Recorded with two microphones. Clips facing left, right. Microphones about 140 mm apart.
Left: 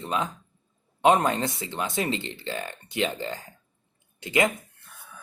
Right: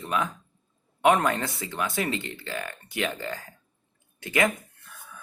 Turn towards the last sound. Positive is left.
turn(degrees=20)  # may be behind; listen again after turning